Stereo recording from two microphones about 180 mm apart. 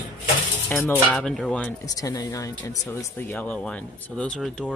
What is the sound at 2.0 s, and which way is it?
Speech, 20° left (ahead or behind).